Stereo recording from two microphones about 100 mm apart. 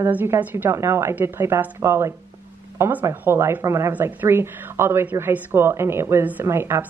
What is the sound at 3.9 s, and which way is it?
A woman's voice, 15° right (ahead or behind).